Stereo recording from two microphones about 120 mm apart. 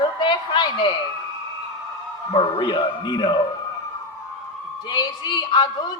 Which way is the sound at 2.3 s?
45° left (ahead or behind).